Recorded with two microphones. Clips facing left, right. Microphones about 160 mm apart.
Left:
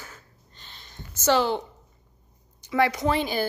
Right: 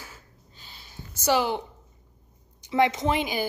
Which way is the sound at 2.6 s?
20° right (ahead or behind).